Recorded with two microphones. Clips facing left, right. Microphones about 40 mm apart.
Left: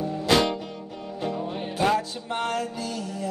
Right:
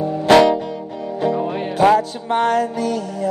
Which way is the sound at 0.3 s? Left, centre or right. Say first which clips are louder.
Right 11 dB; right.